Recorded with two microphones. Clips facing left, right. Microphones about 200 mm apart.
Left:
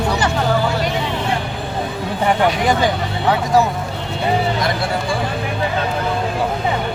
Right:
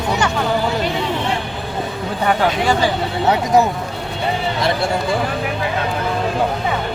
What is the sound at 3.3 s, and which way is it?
Speech, 20° right (ahead or behind).